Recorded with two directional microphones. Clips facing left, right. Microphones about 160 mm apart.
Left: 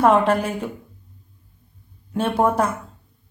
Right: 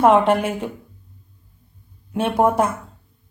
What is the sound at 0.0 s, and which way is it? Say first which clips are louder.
Speech: right 2 dB; 25° right (ahead or behind).